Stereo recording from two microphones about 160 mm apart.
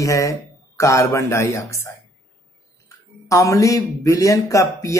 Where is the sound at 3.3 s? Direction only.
20° left (ahead or behind).